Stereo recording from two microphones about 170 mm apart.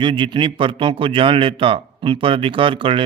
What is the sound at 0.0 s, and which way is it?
Speech, 30° right (ahead or behind).